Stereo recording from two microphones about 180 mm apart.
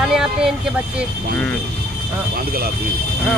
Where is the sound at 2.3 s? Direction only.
55° right (ahead or behind).